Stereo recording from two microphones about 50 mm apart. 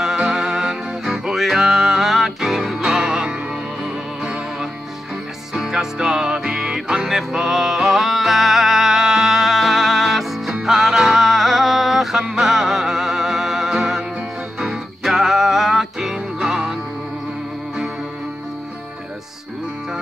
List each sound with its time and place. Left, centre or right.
0.0 s music: centre